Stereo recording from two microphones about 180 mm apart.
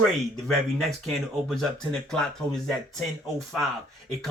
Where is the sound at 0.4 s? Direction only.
Centre (ahead or behind).